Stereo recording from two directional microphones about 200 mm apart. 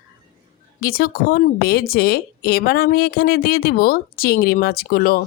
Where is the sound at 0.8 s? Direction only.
45° left (ahead or behind).